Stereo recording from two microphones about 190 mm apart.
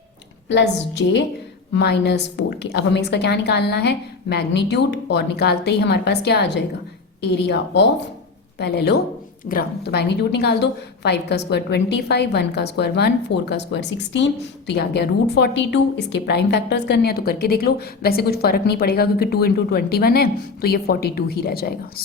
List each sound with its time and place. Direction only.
0.4 s a woman's voice: 65° left (ahead or behind)